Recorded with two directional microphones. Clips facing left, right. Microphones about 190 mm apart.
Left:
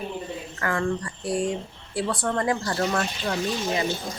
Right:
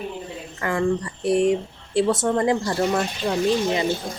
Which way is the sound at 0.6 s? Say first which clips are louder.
Right 4 dB; 20° right (ahead or behind).